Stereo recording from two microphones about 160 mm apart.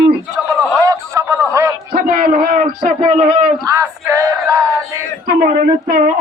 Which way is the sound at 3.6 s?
20° right (ahead or behind).